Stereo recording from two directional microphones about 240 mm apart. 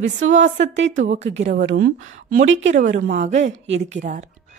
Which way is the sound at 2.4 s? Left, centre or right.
Right.